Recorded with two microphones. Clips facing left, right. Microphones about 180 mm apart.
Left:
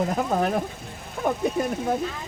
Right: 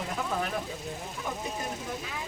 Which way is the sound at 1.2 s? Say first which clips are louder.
Left 12 dB; 55° left (ahead or behind).